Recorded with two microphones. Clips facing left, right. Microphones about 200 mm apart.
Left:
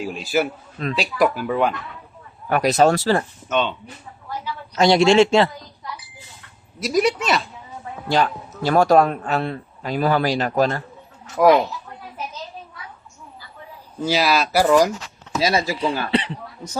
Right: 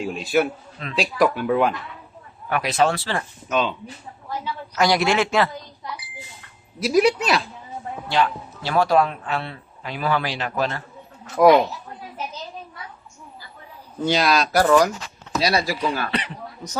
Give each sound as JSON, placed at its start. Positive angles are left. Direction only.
{"t": 0.0, "sound": "speech", "side_deg": 0}
{"t": 2.5, "sound": "speech", "side_deg": 40}
{"t": 3.5, "sound": "speech", "side_deg": -5}
{"t": 4.7, "sound": "speech", "side_deg": 25}
{"t": 6.7, "sound": "speech", "side_deg": 0}
{"t": 8.0, "sound": "speech", "side_deg": 40}
{"t": 11.4, "sound": "speech", "side_deg": 0}
{"t": 14.0, "sound": "speech", "side_deg": 5}
{"t": 16.0, "sound": "speech", "side_deg": 30}